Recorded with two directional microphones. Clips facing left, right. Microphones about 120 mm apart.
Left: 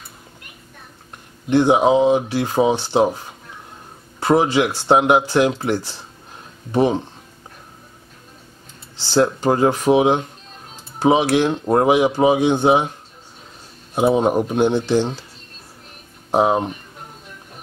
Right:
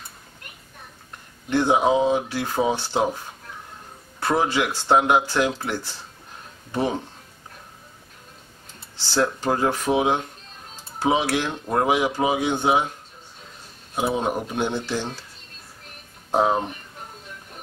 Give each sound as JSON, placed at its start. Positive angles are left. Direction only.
{"t": 1.5, "sound": "speech", "side_deg": 15}
{"t": 4.2, "sound": "speech", "side_deg": 15}
{"t": 9.1, "sound": "speech", "side_deg": 20}
{"t": 11.4, "sound": "speech", "side_deg": 40}
{"t": 12.2, "sound": "speech", "side_deg": 25}
{"t": 14.0, "sound": "speech", "side_deg": 35}
{"t": 14.7, "sound": "speech", "side_deg": 25}
{"t": 16.3, "sound": "speech", "side_deg": 15}